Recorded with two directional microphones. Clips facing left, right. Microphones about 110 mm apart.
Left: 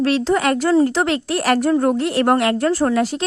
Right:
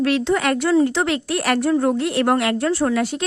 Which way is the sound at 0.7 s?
45° left (ahead or behind).